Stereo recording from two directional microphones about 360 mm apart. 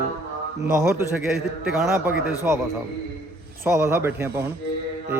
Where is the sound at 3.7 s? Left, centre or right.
Centre.